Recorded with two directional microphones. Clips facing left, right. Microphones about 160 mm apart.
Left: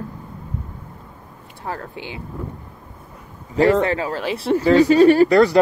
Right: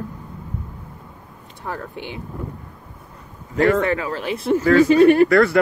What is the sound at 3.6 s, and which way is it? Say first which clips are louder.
Speech: left 1 dB; 25° left (ahead or behind).